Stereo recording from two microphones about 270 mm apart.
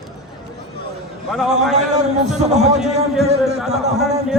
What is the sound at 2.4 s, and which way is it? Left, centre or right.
Speech, right.